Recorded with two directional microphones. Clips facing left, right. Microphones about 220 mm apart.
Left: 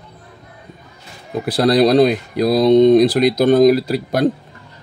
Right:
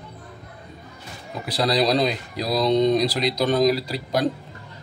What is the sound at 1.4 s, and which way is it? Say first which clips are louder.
Speech: left 8 dB; 50° left (ahead or behind).